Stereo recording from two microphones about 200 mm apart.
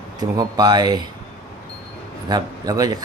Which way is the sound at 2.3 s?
20° right (ahead or behind).